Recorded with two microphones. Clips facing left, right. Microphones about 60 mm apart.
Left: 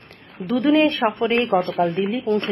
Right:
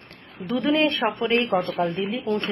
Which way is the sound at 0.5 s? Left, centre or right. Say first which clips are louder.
Left 4 dB; centre.